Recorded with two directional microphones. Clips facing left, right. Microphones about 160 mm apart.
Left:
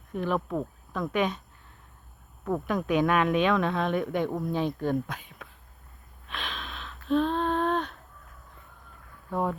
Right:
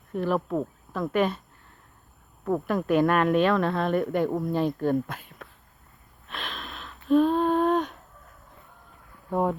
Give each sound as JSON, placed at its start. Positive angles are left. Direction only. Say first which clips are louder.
{"t": 0.1, "sound": "speech", "louder": "right 3 dB", "side_deg": -5}
{"t": 2.4, "sound": "speech", "louder": "right 2 dB", "side_deg": -5}
{"t": 6.2, "sound": "a sound", "louder": "even", "side_deg": 0}
{"t": 9.3, "sound": "speech", "louder": "right 4 dB", "side_deg": -15}